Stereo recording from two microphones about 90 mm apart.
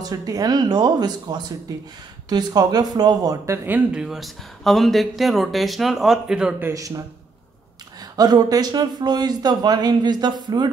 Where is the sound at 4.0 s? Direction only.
5° right (ahead or behind).